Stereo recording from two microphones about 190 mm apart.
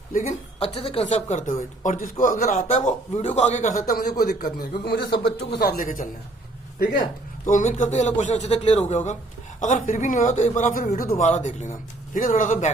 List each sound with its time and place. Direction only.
0.1 s speech: 40° left (ahead or behind)
1.8 s a man's voice: 40° left (ahead or behind)